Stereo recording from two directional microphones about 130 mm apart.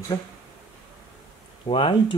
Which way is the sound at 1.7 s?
45° left (ahead or behind).